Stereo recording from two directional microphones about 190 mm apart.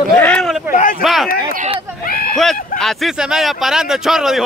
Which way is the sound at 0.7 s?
45° left (ahead or behind).